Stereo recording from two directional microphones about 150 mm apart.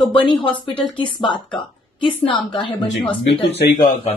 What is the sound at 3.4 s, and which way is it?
Speech, 90° left.